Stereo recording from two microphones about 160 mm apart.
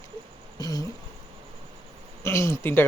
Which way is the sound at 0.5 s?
25° left (ahead or behind).